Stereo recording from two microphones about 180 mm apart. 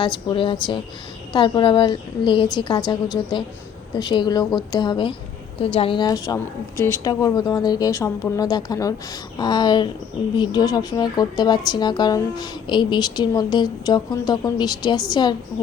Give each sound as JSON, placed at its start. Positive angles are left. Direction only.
{"t": 0.3, "sound": "a woman's voice", "side_deg": 25}